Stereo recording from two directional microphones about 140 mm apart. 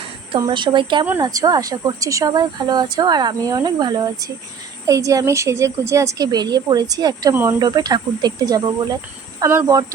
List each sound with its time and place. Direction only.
0.3 s a woman's voice: 30° right (ahead or behind)